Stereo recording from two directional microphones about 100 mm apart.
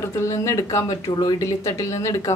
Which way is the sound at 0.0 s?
30° left (ahead or behind).